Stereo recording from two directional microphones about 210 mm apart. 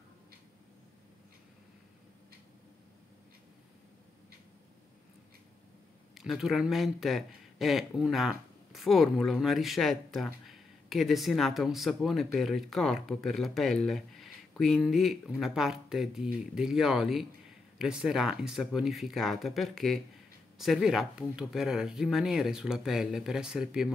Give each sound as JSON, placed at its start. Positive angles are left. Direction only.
{"t": 6.1, "sound": "speech", "side_deg": 0}